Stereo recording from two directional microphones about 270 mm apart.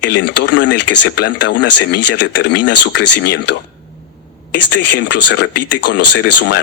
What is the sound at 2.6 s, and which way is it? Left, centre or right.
Speech, left.